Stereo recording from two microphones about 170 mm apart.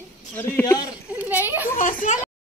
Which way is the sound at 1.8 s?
50° left (ahead or behind).